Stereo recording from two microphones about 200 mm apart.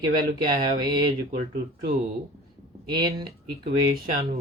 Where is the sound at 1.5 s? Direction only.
50° right (ahead or behind).